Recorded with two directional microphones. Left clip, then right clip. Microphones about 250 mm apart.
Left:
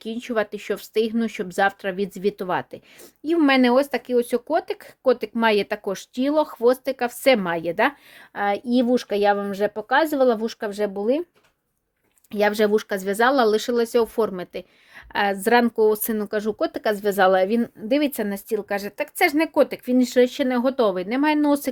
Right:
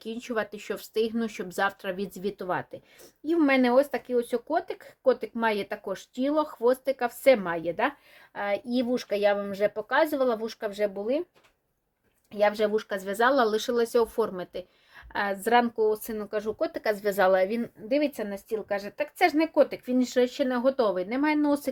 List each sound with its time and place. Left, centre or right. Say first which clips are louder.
0.0 s speech: left 6 dB; left
12.3 s speech: left 5 dB; left